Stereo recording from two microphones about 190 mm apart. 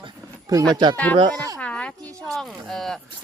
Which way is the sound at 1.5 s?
5° left (ahead or behind).